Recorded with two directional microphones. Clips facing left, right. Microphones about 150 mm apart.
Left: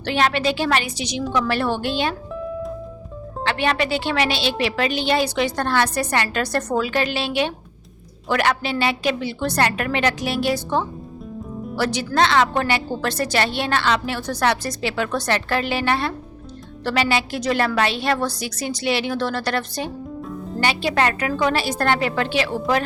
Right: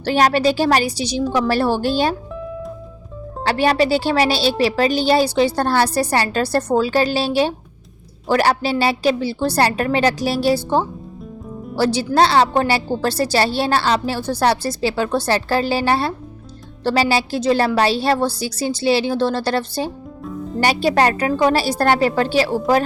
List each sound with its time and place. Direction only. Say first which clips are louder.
0.0 s a woman's voice: right 5 dB; 40° right (ahead or behind)
2.3 s music: left 1 dB; centre (ahead or behind)
3.4 s a woman's voice: right 5 dB; 35° right (ahead or behind)
11.8 s a woman's voice: right 4 dB; 30° right (ahead or behind)